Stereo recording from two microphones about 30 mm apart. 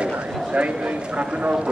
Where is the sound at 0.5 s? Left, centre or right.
Right.